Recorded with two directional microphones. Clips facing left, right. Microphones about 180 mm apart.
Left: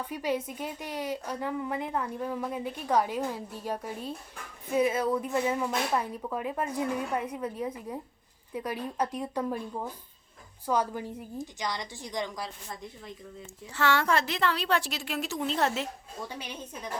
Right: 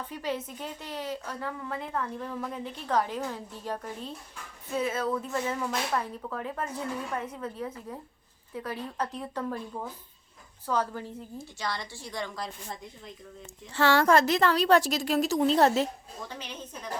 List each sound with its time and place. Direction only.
0.1 s a woman's voice: 10° left (ahead or behind)
13.7 s a woman's voice: 35° right (ahead or behind)
16.3 s a woman's voice: 10° left (ahead or behind)